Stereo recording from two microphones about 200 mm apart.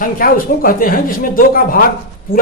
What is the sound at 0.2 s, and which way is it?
A man's voice, 45° left (ahead or behind).